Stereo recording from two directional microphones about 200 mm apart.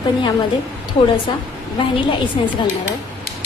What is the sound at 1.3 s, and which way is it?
Speech, 25° left (ahead or behind).